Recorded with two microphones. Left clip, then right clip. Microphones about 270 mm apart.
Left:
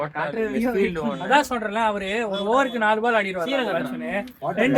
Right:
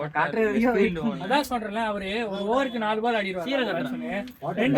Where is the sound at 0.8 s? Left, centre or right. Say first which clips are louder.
Left 2 dB; left.